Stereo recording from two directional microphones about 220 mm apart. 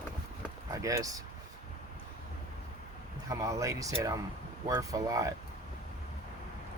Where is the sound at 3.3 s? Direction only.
15° right (ahead or behind).